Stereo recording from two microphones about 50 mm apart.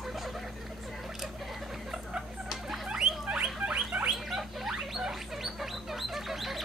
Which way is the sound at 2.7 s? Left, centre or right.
Centre.